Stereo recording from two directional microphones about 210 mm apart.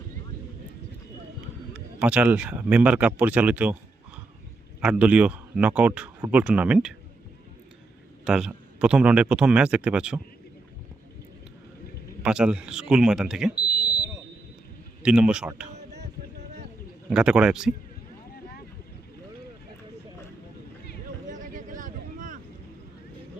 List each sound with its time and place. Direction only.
2.0 s speech: 5° right (ahead or behind)
8.2 s a man's voice: 5° right (ahead or behind)
12.2 s a man's voice: 5° right (ahead or behind)
15.0 s a man's voice: 5° right (ahead or behind)
17.1 s a man's voice: 5° right (ahead or behind)
21.2 s a sound: 40° right (ahead or behind)